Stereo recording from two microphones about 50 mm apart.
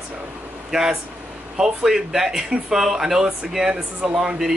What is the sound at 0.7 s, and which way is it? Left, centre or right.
Speech, centre.